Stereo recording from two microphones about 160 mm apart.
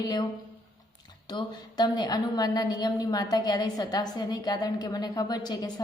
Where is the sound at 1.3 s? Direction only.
25° left (ahead or behind).